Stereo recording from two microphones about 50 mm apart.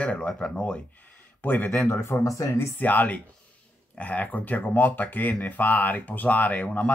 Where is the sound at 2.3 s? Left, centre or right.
Left.